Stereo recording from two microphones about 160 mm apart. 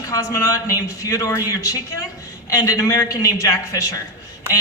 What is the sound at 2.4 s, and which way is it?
A man's voice, 20° left (ahead or behind).